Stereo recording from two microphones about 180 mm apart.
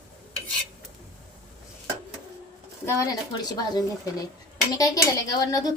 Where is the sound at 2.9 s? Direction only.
20° left (ahead or behind).